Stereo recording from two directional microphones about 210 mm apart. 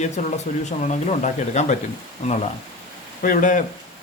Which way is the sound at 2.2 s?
30° left (ahead or behind).